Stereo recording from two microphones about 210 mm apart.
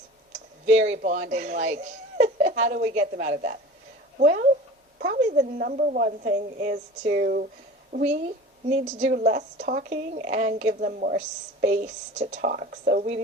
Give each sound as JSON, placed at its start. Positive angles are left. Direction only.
{"t": 1.0, "sound": "speech", "side_deg": -35}
{"t": 7.9, "sound": "speech", "side_deg": -35}